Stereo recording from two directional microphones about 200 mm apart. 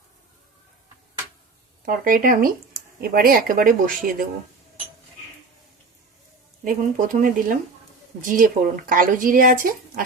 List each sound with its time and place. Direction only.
1.8 s speech: 45° right (ahead or behind)
6.7 s speech: 40° right (ahead or behind)